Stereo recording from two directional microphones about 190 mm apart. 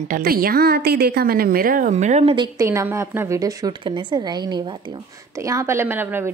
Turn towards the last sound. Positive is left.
turn(degrees=-10)  # may be behind; listen again after turning